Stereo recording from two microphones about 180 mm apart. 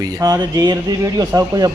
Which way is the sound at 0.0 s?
20° right (ahead or behind).